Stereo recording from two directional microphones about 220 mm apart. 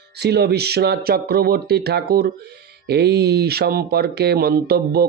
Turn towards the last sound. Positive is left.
turn(degrees=-45)  # may be behind; listen again after turning